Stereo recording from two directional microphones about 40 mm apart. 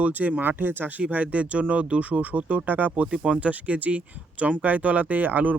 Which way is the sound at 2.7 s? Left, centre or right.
Right.